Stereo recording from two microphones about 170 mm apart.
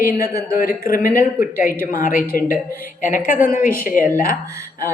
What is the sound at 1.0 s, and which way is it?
Speech, 15° right (ahead or behind).